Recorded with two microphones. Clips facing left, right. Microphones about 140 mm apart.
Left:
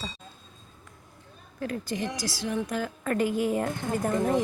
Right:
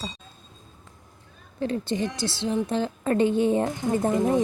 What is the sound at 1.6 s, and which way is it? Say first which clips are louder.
A woman's voice: right 5 dB; 25° right (ahead or behind).